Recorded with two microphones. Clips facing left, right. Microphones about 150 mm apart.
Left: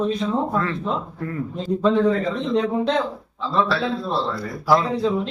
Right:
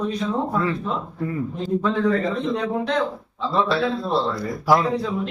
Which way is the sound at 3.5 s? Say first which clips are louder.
Even; 15° right (ahead or behind).